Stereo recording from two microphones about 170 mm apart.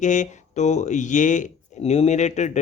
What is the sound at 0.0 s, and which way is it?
Speech, 45° left (ahead or behind).